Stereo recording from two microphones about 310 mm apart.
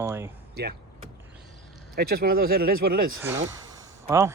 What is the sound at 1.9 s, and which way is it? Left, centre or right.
Speech, right.